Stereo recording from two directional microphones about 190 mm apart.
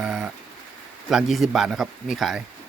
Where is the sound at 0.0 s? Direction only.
5° right (ahead or behind).